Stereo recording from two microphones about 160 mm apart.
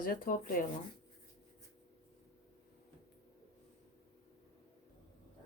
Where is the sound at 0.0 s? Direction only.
60° left (ahead or behind).